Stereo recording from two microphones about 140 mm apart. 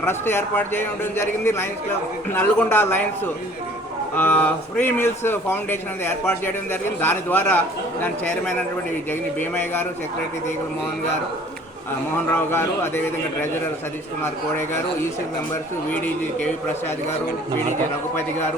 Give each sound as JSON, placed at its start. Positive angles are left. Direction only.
{"t": 0.0, "sound": "speech", "side_deg": 15}
{"t": 4.1, "sound": "speech", "side_deg": 15}
{"t": 9.4, "sound": "speech", "side_deg": 15}
{"t": 12.3, "sound": "speech", "side_deg": 15}
{"t": 14.2, "sound": "speech", "side_deg": 15}